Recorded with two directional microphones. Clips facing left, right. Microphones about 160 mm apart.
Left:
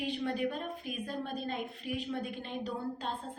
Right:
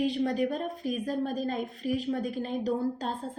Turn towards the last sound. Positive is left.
turn(degrees=-40)  # may be behind; listen again after turning